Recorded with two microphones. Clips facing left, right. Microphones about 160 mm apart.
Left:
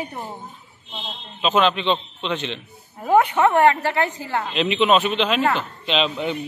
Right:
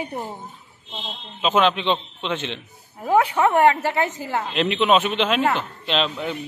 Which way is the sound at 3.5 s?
15° right (ahead or behind).